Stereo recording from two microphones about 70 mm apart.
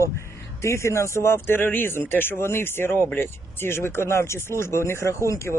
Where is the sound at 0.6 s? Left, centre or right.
Left.